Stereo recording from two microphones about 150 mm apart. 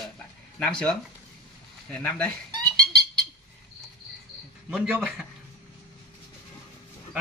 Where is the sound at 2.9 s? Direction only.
90° right.